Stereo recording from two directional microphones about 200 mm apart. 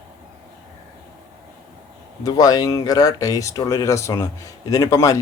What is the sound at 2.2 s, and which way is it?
Speech, 20° left (ahead or behind).